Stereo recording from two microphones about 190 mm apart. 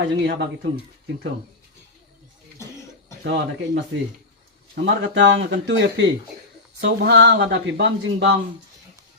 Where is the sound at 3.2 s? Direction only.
70° right (ahead or behind).